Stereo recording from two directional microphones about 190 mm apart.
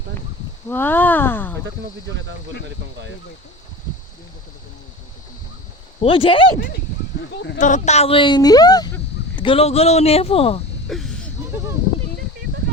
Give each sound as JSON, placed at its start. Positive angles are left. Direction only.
{"t": 0.7, "sound": "speech", "side_deg": 10}
{"t": 6.0, "sound": "a woman's voice", "side_deg": 30}
{"t": 7.6, "sound": "a woman's voice", "side_deg": 40}
{"t": 10.8, "sound": "a sound", "side_deg": 0}